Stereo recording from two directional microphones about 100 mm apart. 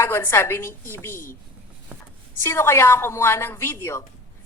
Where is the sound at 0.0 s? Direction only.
25° left (ahead or behind).